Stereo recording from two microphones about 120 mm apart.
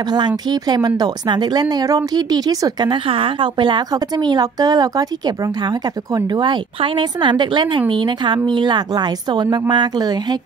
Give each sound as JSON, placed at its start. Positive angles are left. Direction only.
{"t": 0.5, "sound": "speech", "side_deg": -35}